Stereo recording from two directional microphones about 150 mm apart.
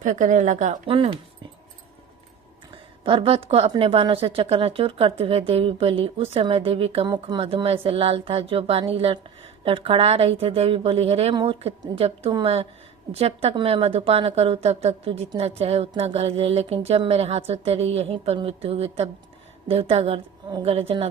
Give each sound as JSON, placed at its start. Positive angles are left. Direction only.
{"t": 0.0, "sound": "speech", "side_deg": -55}
{"t": 0.9, "sound": "a woman's voice", "side_deg": -35}
{"t": 3.0, "sound": "a woman's voice", "side_deg": -35}